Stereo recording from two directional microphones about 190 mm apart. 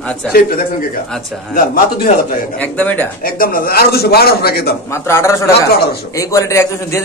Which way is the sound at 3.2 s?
50° left (ahead or behind).